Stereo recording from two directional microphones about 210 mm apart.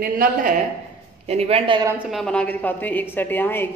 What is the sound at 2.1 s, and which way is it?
A woman's voice, centre (ahead or behind).